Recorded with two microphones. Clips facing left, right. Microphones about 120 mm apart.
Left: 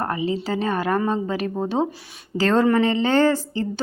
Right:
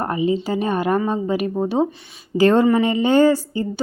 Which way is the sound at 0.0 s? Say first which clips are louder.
Right 4 dB; 15° right (ahead or behind).